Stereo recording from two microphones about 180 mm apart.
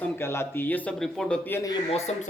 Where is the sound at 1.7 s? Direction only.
35° left (ahead or behind).